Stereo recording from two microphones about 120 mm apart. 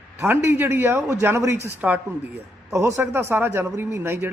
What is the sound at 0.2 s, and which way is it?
A man's voice, 20° right (ahead or behind).